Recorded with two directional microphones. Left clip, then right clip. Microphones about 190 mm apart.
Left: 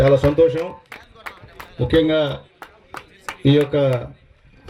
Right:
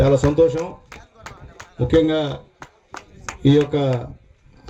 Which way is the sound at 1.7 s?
40° right (ahead or behind).